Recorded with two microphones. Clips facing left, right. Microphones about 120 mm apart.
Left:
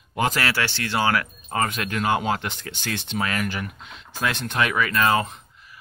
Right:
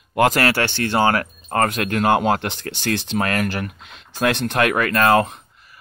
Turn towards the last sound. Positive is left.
turn(degrees=-60)  # may be behind; listen again after turning